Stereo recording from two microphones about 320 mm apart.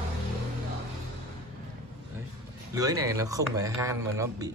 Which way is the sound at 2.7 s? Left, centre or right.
Centre.